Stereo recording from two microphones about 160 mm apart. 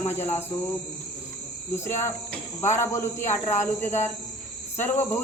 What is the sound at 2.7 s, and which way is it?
A woman's voice, 15° left (ahead or behind).